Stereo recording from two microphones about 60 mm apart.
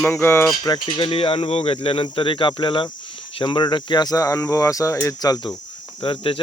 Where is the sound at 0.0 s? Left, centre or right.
Left.